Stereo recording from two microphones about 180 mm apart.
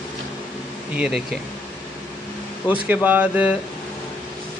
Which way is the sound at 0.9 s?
5° right (ahead or behind).